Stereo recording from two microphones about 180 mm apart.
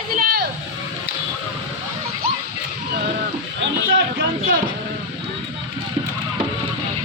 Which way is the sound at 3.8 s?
50° right (ahead or behind).